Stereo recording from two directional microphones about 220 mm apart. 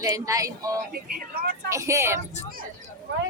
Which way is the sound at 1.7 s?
15° right (ahead or behind).